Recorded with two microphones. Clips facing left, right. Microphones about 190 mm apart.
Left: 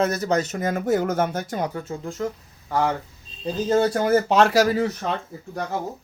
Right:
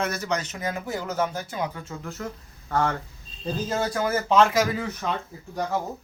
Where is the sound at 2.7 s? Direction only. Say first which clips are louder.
Left 2 dB; 10° left (ahead or behind).